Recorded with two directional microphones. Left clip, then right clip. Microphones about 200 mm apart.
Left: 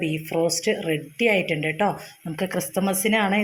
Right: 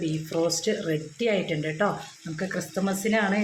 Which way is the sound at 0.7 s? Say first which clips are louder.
Left 3 dB; 20° left (ahead or behind).